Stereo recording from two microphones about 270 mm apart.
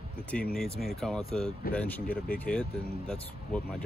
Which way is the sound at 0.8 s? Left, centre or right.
Centre.